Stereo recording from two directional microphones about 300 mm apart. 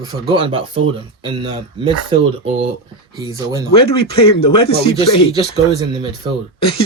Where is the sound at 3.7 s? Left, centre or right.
Centre.